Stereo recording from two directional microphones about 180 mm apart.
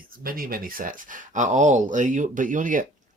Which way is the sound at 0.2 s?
55° right (ahead or behind).